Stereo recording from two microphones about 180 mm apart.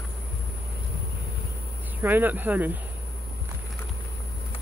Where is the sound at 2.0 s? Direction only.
10° right (ahead or behind).